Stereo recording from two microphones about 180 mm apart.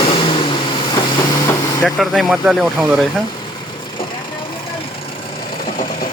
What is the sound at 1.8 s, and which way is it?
Speech, centre (ahead or behind).